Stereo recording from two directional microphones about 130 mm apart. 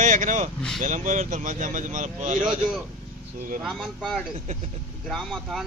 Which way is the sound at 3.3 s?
90° right.